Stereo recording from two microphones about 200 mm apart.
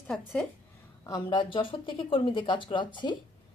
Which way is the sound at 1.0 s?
20° left (ahead or behind).